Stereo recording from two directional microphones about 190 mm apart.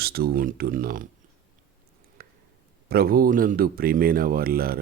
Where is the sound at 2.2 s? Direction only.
50° right (ahead or behind).